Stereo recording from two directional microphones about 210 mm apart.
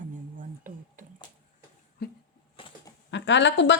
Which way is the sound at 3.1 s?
55° left (ahead or behind).